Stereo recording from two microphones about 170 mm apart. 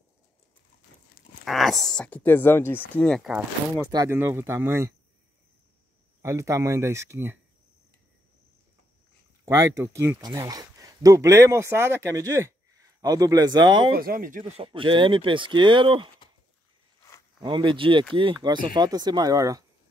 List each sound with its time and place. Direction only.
1.4 s speech: centre (ahead or behind)
3.0 s speech: centre (ahead or behind)
3.8 s speech: 20° right (ahead or behind)
6.2 s speech: 15° right (ahead or behind)
9.4 s speech: 15° right (ahead or behind)
13.9 s speech: 60° right (ahead or behind)
14.6 s speech: 30° right (ahead or behind)
17.4 s speech: 25° right (ahead or behind)